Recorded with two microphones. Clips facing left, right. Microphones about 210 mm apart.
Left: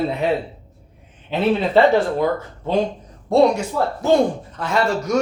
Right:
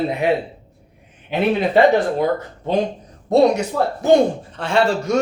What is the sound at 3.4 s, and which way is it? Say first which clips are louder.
Speech: even; 40° right (ahead or behind).